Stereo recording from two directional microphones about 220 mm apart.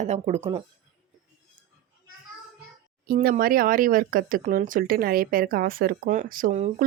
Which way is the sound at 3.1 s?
45° right (ahead or behind).